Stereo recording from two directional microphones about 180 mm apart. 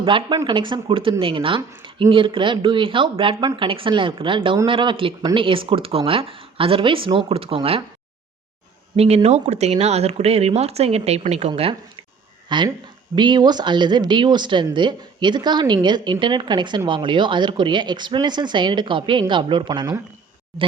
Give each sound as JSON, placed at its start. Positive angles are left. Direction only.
{"t": 0.0, "sound": "speech", "side_deg": -25}
{"t": 9.0, "sound": "speech", "side_deg": -35}